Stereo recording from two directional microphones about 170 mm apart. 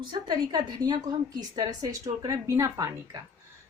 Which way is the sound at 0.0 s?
25° right (ahead or behind).